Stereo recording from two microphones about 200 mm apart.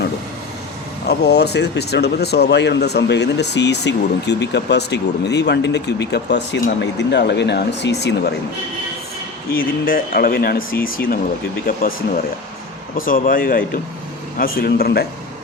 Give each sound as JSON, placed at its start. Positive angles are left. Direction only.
{"t": 1.0, "sound": "speech", "side_deg": 55}
{"t": 9.5, "sound": "speech", "side_deg": 45}